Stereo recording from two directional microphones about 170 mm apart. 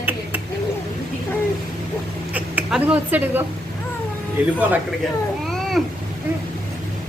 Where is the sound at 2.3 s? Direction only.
10° right (ahead or behind).